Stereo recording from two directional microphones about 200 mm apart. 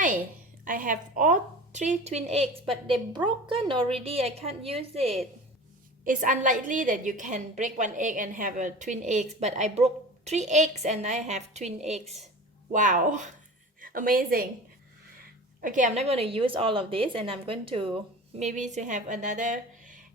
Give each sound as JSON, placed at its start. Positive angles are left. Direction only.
{"t": 0.6, "sound": "a woman's voice", "side_deg": -40}
{"t": 6.1, "sound": "a woman's voice", "side_deg": -40}
{"t": 15.6, "sound": "a woman's voice", "side_deg": -40}